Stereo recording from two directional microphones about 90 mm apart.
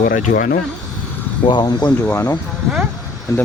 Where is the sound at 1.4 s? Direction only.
55° left (ahead or behind).